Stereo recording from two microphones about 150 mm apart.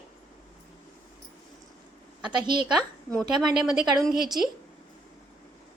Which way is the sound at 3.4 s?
5° right (ahead or behind).